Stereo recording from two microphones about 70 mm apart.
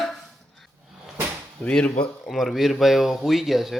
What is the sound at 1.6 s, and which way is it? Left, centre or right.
Speech, centre.